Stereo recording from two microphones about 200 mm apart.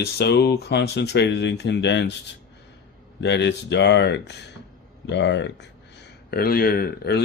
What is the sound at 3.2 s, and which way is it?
Speech, 60° left (ahead or behind).